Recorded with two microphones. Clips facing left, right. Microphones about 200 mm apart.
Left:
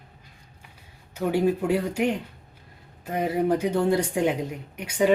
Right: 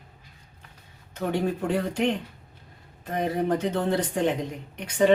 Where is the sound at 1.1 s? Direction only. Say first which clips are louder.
Left 4 dB; 10° left (ahead or behind).